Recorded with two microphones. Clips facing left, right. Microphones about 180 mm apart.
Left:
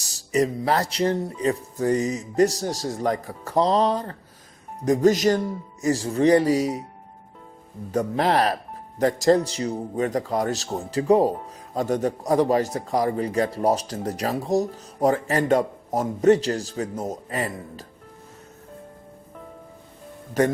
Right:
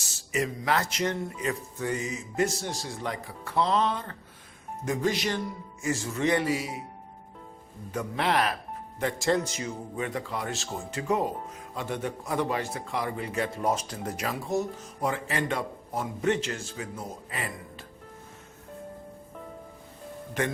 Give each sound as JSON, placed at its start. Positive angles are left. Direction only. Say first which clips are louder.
{"t": 0.0, "sound": "a man's voice", "louder": "left 8 dB", "side_deg": 35}
{"t": 7.9, "sound": "a man's voice", "louder": "left 6 dB", "side_deg": 40}